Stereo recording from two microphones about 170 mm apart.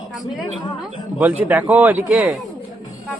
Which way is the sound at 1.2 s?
10° right (ahead or behind).